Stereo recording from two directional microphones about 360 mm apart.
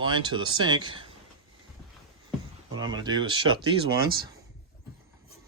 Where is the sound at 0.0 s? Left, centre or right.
Centre.